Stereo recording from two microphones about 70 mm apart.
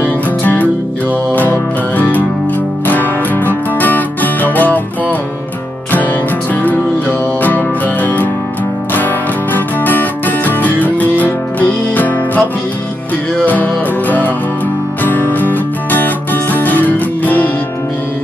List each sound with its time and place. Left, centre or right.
0.0 s music: left
6.5 s music: left
13.5 s music: left